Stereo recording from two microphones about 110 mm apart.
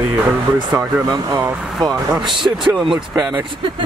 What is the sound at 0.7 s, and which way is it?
Speech, 35° right (ahead or behind).